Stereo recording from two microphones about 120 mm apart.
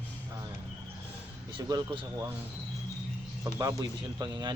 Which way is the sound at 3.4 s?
30° right (ahead or behind).